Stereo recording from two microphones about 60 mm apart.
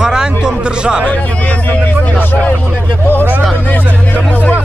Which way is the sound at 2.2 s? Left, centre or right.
Left.